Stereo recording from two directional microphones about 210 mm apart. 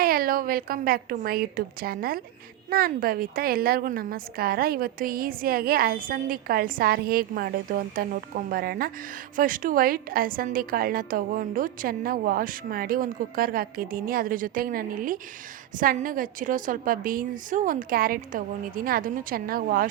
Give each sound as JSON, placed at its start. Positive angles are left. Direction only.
{"t": 0.0, "sound": "a woman's voice", "side_deg": -45}